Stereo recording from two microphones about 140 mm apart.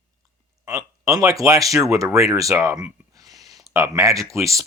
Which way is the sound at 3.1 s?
25° right (ahead or behind).